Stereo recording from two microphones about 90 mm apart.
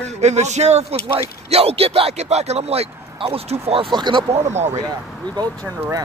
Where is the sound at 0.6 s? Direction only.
90° right.